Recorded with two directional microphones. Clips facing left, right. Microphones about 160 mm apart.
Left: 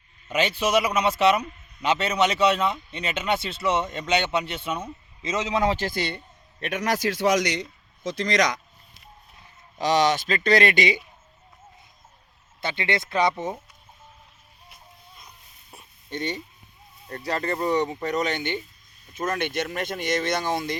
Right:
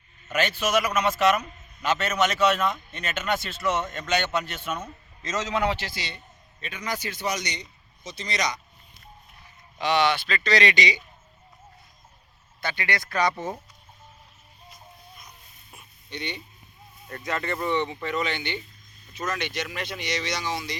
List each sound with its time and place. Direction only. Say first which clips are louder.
0.3 s a man's voice: left 2 dB; 15° left (ahead or behind)
5.5 s speech: left 4 dB; 40° left (ahead or behind)
6.6 s speech: left 7 dB; 75° left (ahead or behind)
9.7 s speech: left 2 dB; 40° left (ahead or behind)
12.5 s speech: left 3 dB; 25° left (ahead or behind)
15.7 s a sound: left 5 dB; 45° left (ahead or behind)
17.1 s speech: left 2 dB; 35° left (ahead or behind); by 20.7 s 50° left (ahead or behind)